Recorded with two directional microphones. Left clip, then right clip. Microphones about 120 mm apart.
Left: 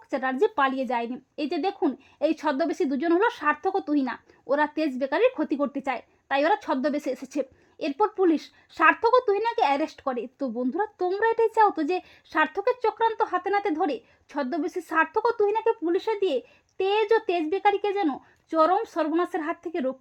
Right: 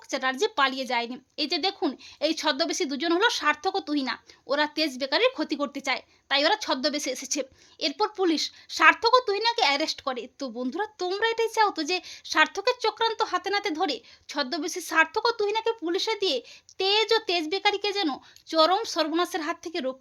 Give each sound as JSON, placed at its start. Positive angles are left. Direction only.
{"t": 0.1, "sound": "a woman's voice", "side_deg": 55}
{"t": 11.5, "sound": "a woman's voice", "side_deg": 65}
{"t": 15.8, "sound": "a child's voice", "side_deg": 30}
{"t": 17.1, "sound": "a woman's voice", "side_deg": 55}
{"t": 18.6, "sound": "speech", "side_deg": 25}
{"t": 19.7, "sound": "a child's voice", "side_deg": 40}